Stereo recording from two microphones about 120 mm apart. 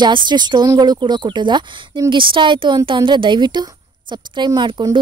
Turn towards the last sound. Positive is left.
turn(degrees=-40)  # may be behind; listen again after turning